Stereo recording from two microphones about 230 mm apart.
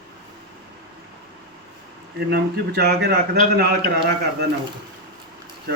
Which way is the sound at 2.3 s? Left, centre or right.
Right.